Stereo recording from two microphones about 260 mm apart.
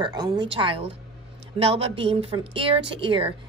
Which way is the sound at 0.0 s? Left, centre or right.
Centre.